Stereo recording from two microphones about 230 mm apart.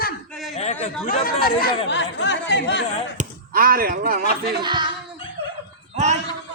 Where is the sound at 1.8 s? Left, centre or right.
Left.